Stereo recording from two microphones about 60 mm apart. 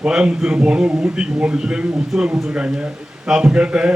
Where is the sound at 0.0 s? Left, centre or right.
Centre.